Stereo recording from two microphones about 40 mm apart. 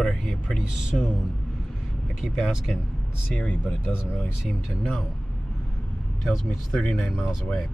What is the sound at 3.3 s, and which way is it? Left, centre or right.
Speech, left.